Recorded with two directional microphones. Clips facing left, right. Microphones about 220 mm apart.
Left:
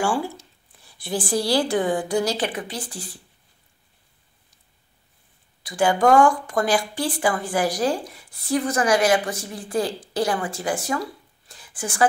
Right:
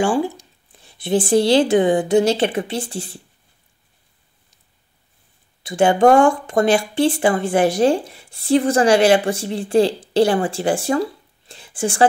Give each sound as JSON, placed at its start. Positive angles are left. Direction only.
{"t": 0.0, "sound": "speech", "side_deg": -20}
{"t": 5.6, "sound": "speech", "side_deg": -25}